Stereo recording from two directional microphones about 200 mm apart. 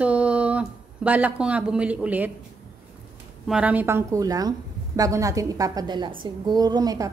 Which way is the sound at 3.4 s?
5° right (ahead or behind).